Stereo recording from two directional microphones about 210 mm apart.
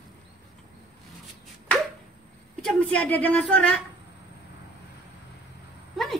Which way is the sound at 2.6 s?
5° left (ahead or behind).